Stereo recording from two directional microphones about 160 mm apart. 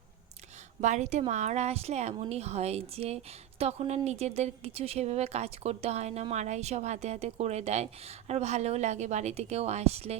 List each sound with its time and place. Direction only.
0.8 s speech: 45° right (ahead or behind)